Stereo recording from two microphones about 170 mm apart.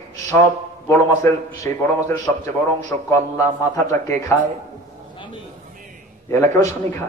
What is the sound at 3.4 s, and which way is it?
Mantra, 20° left (ahead or behind).